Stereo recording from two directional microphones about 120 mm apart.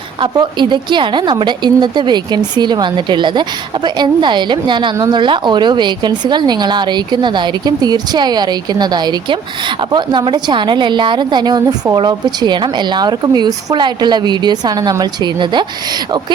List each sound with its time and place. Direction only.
0.2 s a woman's voice: 40° right (ahead or behind)